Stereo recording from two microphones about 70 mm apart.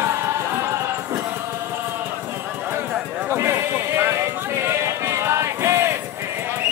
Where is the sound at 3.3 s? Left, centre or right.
Right.